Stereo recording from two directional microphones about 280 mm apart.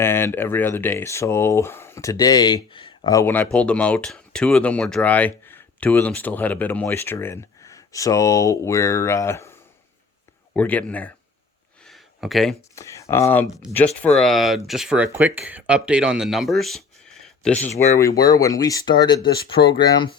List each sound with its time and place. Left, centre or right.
0.0 s speech: centre
10.5 s speech: centre
11.9 s a sound: centre
12.7 s speech: centre